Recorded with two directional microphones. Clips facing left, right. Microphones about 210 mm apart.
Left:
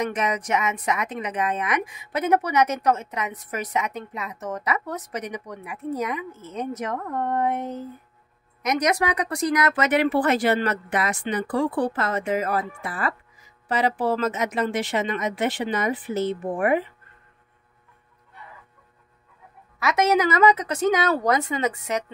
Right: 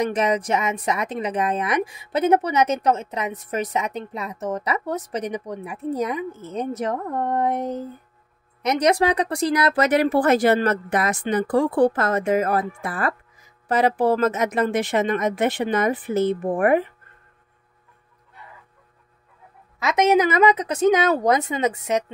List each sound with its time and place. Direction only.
0.0 s a woman's voice: 30° right (ahead or behind); by 16.8 s 50° right (ahead or behind)
19.8 s a woman's voice: 20° right (ahead or behind)